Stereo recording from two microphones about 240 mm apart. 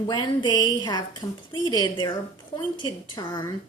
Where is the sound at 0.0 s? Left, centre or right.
Centre.